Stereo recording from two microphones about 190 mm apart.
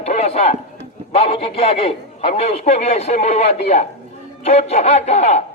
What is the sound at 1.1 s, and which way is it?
A man's voice, 30° left (ahead or behind).